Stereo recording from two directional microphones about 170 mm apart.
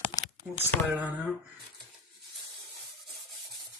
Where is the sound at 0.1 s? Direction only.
20° left (ahead or behind).